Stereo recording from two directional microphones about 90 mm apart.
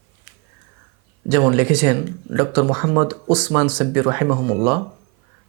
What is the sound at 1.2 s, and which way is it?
Speech, 20° right (ahead or behind).